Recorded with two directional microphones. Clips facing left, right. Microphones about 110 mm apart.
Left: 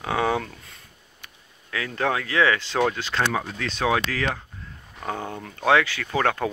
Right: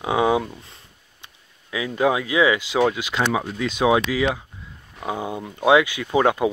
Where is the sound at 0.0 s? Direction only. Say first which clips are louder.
Right 4 dB; 15° right (ahead or behind).